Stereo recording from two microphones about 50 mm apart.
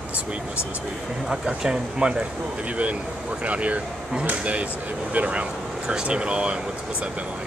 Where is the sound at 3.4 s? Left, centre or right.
Right.